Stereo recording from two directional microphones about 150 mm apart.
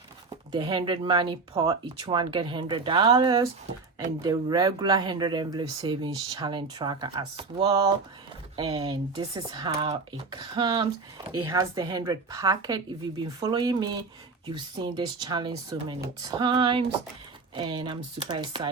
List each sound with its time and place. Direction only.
0.5 s speech: 30° right (ahead or behind)